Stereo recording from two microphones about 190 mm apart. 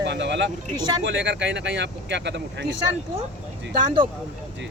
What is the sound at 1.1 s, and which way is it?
Speech, 70° right (ahead or behind).